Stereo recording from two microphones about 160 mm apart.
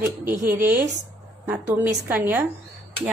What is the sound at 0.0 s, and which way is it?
A woman's voice, 15° right (ahead or behind).